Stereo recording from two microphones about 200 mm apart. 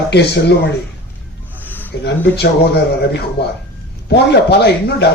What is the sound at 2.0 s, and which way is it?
Speech, 55° left (ahead or behind).